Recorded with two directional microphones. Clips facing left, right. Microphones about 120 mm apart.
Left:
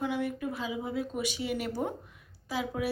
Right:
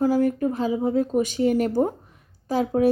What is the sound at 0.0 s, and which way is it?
Speech, 40° right (ahead or behind).